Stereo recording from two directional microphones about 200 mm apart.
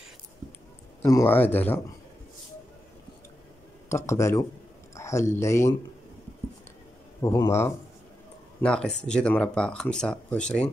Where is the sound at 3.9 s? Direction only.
15° left (ahead or behind).